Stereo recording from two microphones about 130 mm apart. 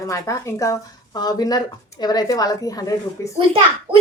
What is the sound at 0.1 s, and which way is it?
A woman's voice, 25° left (ahead or behind).